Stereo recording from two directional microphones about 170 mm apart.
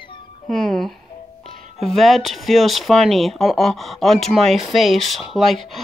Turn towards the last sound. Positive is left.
turn(degrees=0)  # may be behind; listen again after turning